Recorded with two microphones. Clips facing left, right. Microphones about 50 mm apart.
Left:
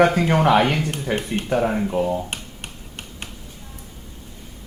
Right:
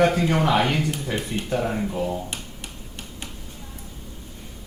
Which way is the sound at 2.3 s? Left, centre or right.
Left.